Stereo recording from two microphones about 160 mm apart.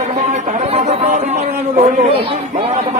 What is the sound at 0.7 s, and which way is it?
Speech, 45° right (ahead or behind).